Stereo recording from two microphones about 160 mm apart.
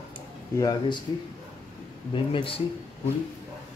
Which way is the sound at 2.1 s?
35° left (ahead or behind).